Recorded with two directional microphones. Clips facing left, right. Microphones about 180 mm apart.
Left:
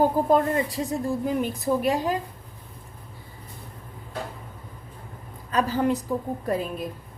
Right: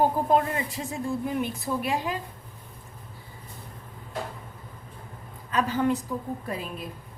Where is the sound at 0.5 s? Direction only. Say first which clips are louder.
Left 6 dB; 40° left (ahead or behind).